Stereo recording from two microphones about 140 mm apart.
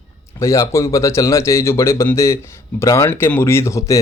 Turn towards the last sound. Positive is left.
turn(degrees=20)  # may be behind; listen again after turning